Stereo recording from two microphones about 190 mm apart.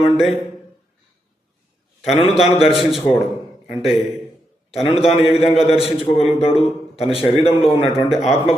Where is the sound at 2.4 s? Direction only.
30° left (ahead or behind).